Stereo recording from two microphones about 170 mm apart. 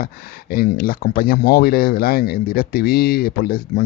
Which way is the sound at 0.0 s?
60° left (ahead or behind).